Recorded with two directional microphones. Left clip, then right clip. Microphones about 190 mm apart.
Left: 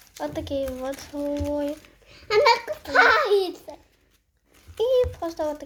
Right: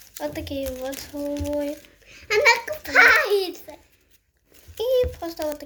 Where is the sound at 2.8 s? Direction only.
5° right (ahead or behind).